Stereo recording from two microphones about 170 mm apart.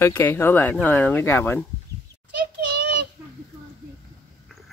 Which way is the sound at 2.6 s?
85° right.